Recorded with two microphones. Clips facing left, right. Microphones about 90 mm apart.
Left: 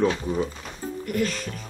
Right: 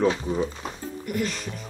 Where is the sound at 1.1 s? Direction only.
10° right (ahead or behind).